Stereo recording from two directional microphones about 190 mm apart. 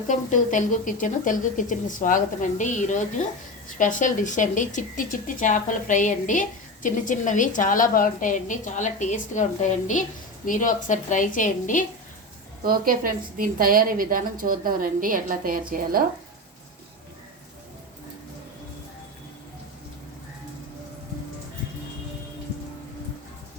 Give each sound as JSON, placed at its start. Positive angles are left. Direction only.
{"t": 0.1, "sound": "speech", "side_deg": 40}
{"t": 12.6, "sound": "a woman's voice", "side_deg": -50}